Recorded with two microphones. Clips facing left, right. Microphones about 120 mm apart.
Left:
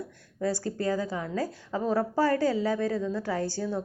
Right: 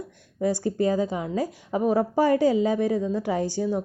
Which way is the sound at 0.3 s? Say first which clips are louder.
Right 5 dB; 20° right (ahead or behind).